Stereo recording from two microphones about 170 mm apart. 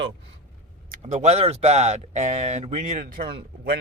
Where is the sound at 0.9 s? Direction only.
45° right (ahead or behind).